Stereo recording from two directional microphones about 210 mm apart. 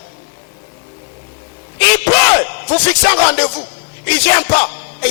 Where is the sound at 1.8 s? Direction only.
10° left (ahead or behind).